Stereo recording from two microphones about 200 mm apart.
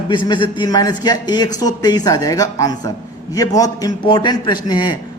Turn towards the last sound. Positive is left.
turn(degrees=20)  # may be behind; listen again after turning